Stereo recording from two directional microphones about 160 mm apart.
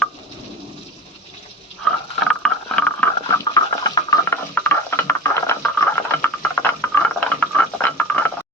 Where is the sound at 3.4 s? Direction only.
25° left (ahead or behind).